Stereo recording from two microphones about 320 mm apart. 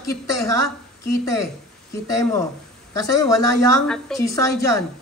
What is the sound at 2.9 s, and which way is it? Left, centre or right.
A woman's voice, centre.